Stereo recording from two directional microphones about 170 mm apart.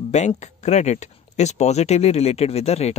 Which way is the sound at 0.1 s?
40° left (ahead or behind).